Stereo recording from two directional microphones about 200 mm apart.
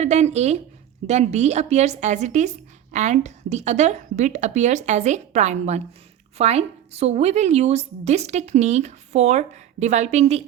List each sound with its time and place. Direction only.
0.0 s a woman's voice: 35° right (ahead or behind)